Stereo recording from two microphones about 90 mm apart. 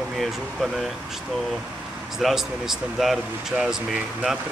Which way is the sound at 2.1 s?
5° right (ahead or behind).